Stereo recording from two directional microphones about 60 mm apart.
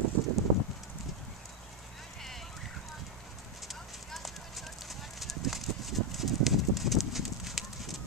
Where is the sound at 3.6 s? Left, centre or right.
Centre.